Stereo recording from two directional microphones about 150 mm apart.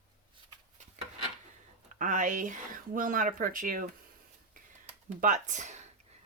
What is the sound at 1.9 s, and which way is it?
Speech, 60° right (ahead or behind).